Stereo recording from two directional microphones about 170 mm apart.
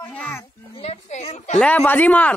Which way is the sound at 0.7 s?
40° left (ahead or behind).